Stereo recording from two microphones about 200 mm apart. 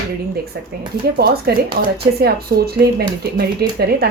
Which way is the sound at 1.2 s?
55° right (ahead or behind).